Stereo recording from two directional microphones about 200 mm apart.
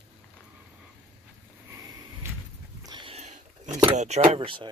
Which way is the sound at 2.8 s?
25° right (ahead or behind).